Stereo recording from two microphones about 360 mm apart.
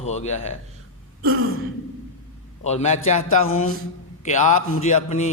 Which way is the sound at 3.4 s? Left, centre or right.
Left.